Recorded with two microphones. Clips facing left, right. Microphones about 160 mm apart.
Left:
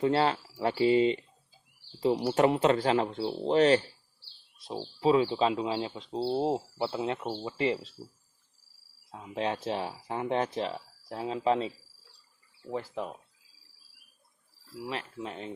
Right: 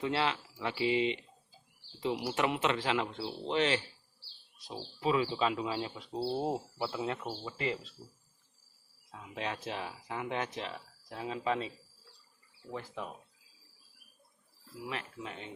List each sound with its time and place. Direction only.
0.0 s speech: 40° left (ahead or behind); by 7.8 s 25° left (ahead or behind)
9.1 s speech: 30° left (ahead or behind)
12.9 s speech: 25° left (ahead or behind)
14.8 s speech: 30° left (ahead or behind)